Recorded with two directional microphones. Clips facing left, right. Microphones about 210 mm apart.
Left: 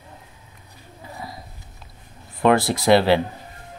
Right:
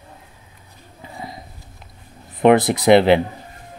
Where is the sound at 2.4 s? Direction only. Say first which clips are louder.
Right 4 dB; 20° right (ahead or behind).